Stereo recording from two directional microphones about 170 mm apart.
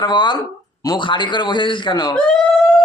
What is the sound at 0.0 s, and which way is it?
A man's voice, 25° left (ahead or behind).